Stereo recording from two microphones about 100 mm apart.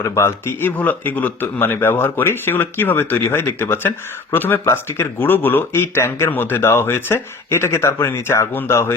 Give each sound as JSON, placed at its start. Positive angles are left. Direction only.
{"t": 0.0, "sound": "speech", "side_deg": 25}